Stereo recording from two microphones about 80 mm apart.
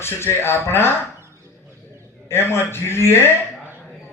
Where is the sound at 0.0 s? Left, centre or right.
Left.